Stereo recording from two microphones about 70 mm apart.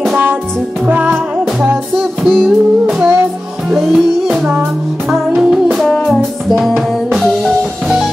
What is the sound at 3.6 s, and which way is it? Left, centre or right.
Music, centre.